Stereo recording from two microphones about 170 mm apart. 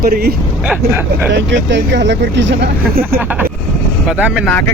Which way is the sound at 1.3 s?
90° right.